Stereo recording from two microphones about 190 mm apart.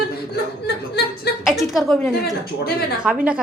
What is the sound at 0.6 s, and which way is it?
Speech, 60° left (ahead or behind).